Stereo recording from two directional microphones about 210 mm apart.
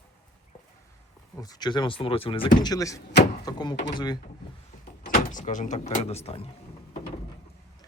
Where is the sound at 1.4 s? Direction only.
20° left (ahead or behind).